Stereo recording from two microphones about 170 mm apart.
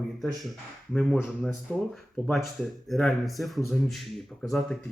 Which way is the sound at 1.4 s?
5° left (ahead or behind).